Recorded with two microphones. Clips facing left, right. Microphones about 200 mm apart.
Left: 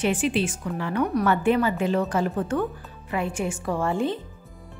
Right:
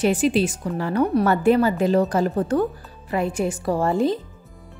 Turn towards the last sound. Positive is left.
turn(degrees=-35)  # may be behind; listen again after turning